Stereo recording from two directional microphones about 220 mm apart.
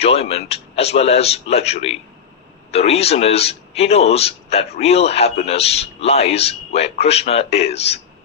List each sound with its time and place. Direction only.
0.0 s a man's voice: 25° left (ahead or behind)